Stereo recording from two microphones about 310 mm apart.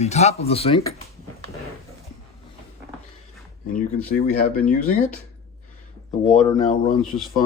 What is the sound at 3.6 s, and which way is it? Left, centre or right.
Speech, left.